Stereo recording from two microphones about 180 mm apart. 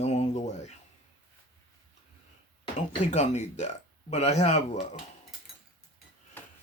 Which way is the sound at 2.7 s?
40° left (ahead or behind).